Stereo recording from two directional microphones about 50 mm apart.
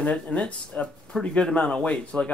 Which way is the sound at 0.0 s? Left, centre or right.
Left.